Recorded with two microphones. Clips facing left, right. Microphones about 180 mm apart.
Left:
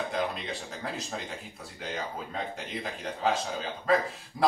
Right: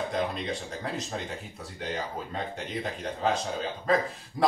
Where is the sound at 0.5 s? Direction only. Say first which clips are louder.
Right 3 dB; centre (ahead or behind).